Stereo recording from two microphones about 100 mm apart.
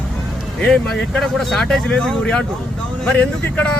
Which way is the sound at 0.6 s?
10° left (ahead or behind).